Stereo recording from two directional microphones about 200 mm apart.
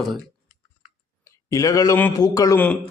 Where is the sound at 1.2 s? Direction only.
15° left (ahead or behind).